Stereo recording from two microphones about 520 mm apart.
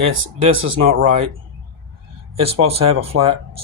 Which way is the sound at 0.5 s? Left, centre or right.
Right.